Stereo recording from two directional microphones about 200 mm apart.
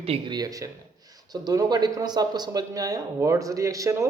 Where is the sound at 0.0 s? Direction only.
25° right (ahead or behind).